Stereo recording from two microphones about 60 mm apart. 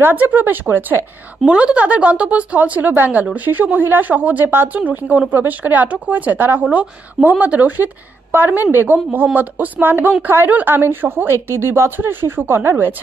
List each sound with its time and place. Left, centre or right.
0.0 s a woman's voice: right
1.4 s a woman's voice: centre; by 12.9 s right